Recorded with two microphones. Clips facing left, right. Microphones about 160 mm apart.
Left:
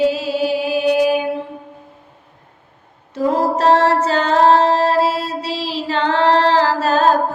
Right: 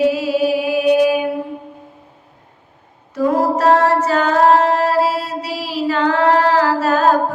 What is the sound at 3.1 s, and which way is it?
Female singing, 25° left (ahead or behind).